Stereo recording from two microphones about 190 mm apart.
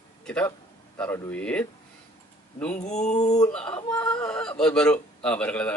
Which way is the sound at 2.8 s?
35° left (ahead or behind).